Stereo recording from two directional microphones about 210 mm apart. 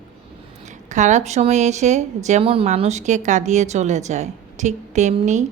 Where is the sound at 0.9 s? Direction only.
35° right (ahead or behind).